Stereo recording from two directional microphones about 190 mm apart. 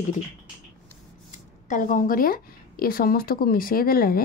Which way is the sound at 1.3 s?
40° left (ahead or behind).